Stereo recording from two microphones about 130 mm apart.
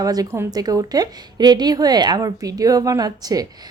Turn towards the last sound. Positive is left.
turn(degrees=-30)  # may be behind; listen again after turning